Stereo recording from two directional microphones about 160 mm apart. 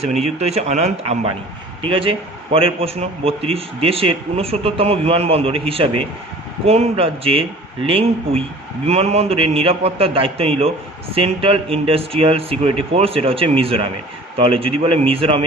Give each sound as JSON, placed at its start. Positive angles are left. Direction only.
{"t": 0.0, "sound": "a man's voice", "side_deg": -45}